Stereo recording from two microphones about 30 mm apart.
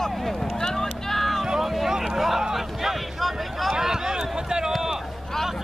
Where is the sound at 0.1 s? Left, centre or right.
Centre.